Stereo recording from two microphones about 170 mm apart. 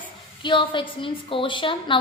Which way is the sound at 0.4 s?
30° left (ahead or behind).